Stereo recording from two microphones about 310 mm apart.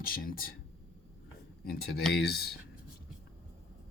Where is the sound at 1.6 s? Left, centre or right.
Left.